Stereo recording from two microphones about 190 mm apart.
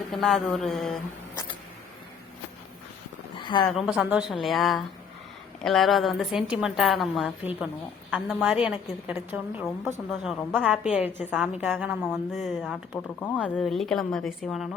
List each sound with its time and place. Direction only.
0.1 s a woman's voice: centre (ahead or behind)
3.3 s a sound: 25° left (ahead or behind)
3.7 s a woman's voice: 5° right (ahead or behind)
12.0 s a woman's voice: centre (ahead or behind)
13.3 s a woman's voice: centre (ahead or behind)